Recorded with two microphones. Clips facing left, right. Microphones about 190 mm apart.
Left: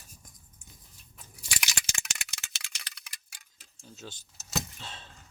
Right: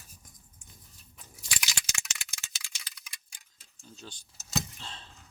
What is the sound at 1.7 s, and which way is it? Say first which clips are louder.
Rattle: left 1 dB; 65° left (ahead or behind).